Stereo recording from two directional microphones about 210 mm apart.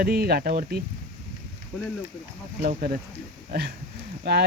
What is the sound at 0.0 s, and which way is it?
Speech, 45° right (ahead or behind).